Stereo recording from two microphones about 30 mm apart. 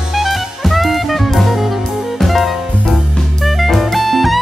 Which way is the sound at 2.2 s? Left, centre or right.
Centre.